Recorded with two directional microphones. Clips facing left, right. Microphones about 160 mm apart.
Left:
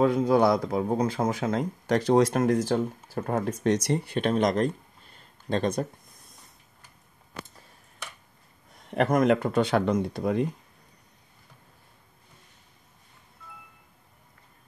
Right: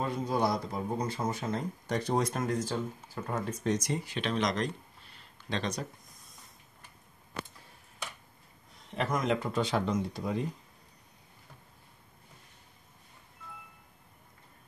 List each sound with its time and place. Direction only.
0.0 s speech: 90° left; by 5.9 s 50° left (ahead or behind)
8.9 s speech: 55° left (ahead or behind)